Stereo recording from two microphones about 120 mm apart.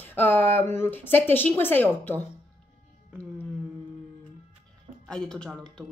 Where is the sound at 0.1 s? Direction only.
15° left (ahead or behind).